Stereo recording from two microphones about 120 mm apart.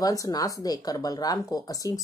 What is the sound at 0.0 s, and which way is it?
Speech, 30° left (ahead or behind).